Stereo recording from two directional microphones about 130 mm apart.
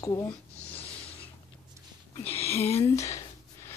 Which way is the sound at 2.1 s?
50° left (ahead or behind).